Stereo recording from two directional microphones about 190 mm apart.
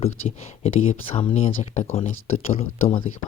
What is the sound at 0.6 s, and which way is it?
Speech, 30° left (ahead or behind).